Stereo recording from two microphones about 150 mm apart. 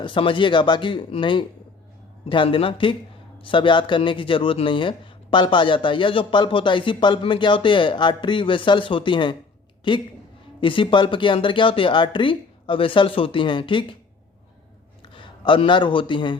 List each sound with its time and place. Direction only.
0.0 s speech: 35° left (ahead or behind)
15.1 s a man's voice: 35° left (ahead or behind)